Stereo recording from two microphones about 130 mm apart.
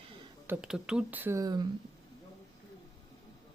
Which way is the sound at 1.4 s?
30° right (ahead or behind).